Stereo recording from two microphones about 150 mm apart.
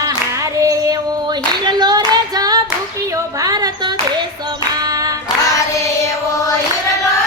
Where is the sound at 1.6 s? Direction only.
30° right (ahead or behind).